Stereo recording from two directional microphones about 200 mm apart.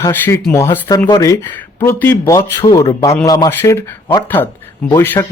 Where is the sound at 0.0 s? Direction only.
15° left (ahead or behind).